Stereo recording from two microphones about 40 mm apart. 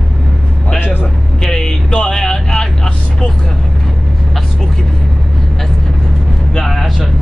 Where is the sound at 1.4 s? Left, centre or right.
Centre.